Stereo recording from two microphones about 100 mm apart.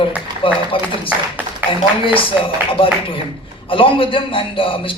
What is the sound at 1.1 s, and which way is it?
Speech, 15° right (ahead or behind).